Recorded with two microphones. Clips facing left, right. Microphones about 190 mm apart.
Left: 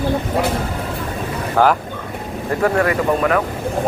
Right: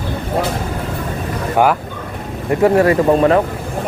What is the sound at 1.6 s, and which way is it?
Speech, 20° right (ahead or behind).